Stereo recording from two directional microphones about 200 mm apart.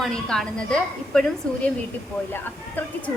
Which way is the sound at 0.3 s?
5° left (ahead or behind).